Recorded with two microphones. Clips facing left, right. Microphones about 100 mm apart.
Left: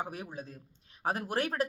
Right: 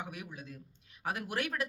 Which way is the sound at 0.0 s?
35° left (ahead or behind).